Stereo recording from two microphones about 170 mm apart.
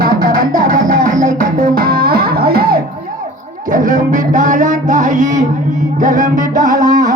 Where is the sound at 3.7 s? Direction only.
50° right (ahead or behind).